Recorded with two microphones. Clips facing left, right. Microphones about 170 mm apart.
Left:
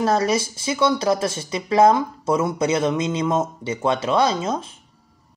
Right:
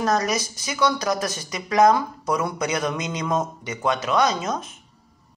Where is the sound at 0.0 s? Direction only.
30° left (ahead or behind).